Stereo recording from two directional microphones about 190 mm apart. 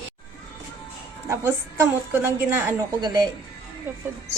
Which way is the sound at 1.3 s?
15° right (ahead or behind).